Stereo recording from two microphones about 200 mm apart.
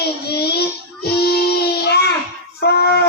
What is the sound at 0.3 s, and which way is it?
Child singing, 55° left (ahead or behind).